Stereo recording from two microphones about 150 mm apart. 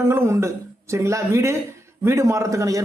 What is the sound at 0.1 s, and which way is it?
A man's voice, 15° right (ahead or behind).